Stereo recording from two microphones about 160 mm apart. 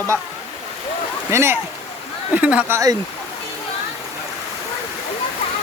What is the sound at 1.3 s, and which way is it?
Speech, 15° right (ahead or behind).